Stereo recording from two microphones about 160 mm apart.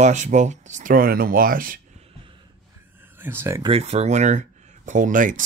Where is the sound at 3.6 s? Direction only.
40° right (ahead or behind); by 5.4 s 55° right (ahead or behind).